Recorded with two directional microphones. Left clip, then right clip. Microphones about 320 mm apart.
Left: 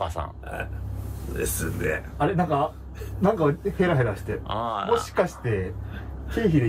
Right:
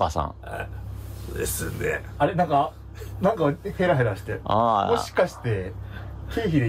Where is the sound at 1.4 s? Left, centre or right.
Centre.